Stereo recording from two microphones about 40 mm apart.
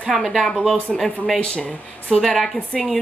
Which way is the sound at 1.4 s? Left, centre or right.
Left.